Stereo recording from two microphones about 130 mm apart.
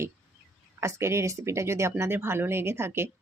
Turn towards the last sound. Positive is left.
turn(degrees=-20)  # may be behind; listen again after turning